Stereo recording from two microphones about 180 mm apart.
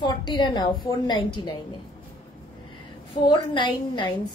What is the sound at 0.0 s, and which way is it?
A woman's voice, 25° left (ahead or behind).